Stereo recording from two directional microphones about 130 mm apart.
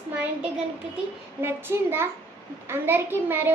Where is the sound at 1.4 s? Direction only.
20° right (ahead or behind).